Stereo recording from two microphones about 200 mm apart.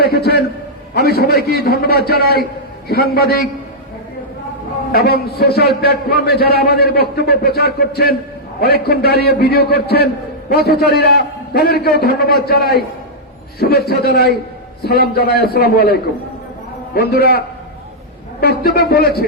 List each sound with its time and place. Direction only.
0.0 s a sound: 50° left (ahead or behind)
0.9 s a man's voice: 50° left (ahead or behind)
4.9 s a man's voice: 50° left (ahead or behind)
18.3 s a man's voice: 50° left (ahead or behind)